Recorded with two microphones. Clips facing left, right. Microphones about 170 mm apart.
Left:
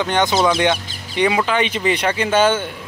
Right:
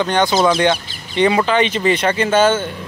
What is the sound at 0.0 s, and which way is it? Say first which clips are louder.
Speech: right 2 dB; 20° left (ahead or behind).